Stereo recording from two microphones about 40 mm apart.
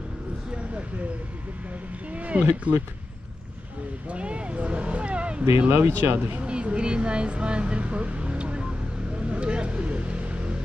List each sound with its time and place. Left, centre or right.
2.1 s speech: right
4.1 s speech: right
5.7 s speech: right
6.4 s speech: right
9.3 s vehicle: right